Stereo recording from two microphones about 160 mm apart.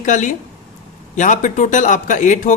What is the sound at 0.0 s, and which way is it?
A man's voice, 50° left (ahead or behind).